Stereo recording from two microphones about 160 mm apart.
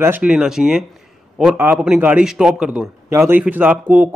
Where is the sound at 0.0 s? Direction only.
10° right (ahead or behind).